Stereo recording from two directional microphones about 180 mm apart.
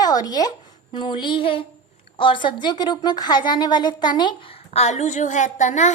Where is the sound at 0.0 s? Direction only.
20° left (ahead or behind).